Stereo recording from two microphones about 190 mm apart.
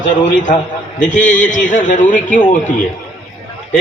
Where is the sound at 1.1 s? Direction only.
40° left (ahead or behind).